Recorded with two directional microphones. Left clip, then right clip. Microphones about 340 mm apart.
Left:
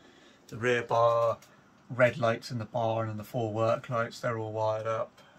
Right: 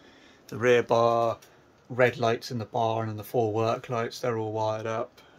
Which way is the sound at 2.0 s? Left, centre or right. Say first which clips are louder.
Right 2 dB; right.